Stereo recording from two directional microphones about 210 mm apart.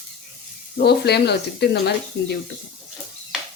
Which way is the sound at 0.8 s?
50° left (ahead or behind).